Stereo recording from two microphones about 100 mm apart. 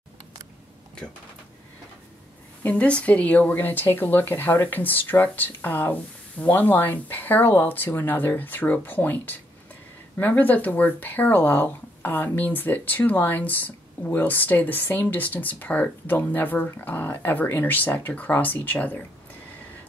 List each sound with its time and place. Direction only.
2.6 s speech: 15° left (ahead or behind)